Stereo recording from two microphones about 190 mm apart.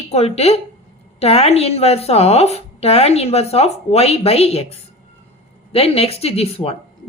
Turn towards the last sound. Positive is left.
turn(degrees=30)  # may be behind; listen again after turning